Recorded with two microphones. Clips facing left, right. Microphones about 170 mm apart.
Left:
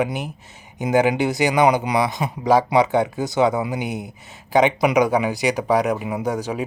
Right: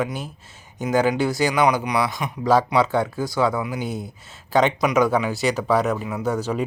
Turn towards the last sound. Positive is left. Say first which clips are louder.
# even
turn(degrees=15)  # may be behind; listen again after turning